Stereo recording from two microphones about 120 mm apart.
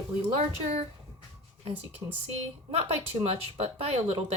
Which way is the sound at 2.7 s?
60° right (ahead or behind).